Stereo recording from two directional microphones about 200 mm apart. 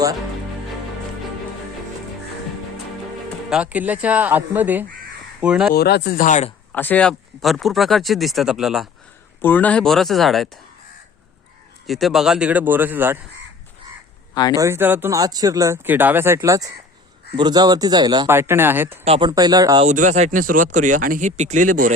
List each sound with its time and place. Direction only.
3.5 s speech: 5° right (ahead or behind)
5.7 s speech: 55° left (ahead or behind)
6.7 s speech: 10° left (ahead or behind)
9.4 s speech: 10° left (ahead or behind)
11.9 s speech: centre (ahead or behind)
14.5 s speech: 15° right (ahead or behind)
19.0 s speech: 30° right (ahead or behind)
19.8 s speech: 35° right (ahead or behind)